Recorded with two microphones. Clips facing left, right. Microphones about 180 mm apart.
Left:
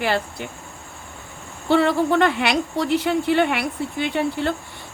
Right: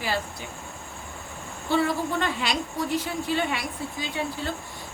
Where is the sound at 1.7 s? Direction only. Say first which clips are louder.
Left 7 dB; 70° left (ahead or behind).